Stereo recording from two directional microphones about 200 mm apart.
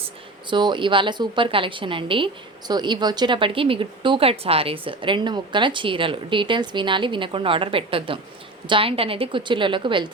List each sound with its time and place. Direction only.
0.5 s a woman's voice: 25° right (ahead or behind)